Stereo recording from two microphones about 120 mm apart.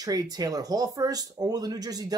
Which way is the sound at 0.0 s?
30° right (ahead or behind).